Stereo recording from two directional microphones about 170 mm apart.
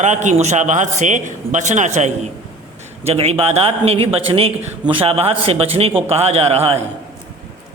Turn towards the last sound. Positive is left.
turn(degrees=-35)  # may be behind; listen again after turning